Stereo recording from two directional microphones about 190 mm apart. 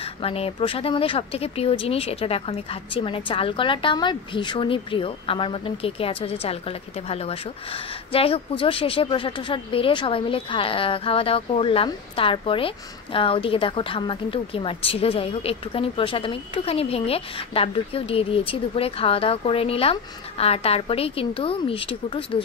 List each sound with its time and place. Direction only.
0.0 s speech: 30° left (ahead or behind)